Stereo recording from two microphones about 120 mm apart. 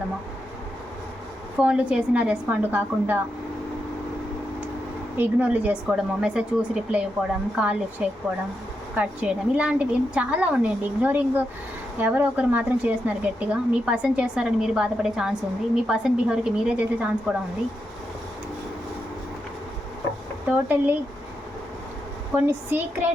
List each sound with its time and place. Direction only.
1.5 s a woman's voice: 10° right (ahead or behind)
5.1 s a woman's voice: 15° right (ahead or behind)
20.7 s a woman's voice: 15° right (ahead or behind)
22.4 s a woman's voice: 15° right (ahead or behind)